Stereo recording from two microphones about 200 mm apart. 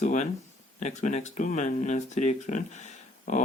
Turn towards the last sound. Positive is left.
turn(degrees=35)  # may be behind; listen again after turning